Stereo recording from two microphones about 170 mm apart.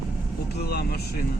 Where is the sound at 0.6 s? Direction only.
70° left (ahead or behind).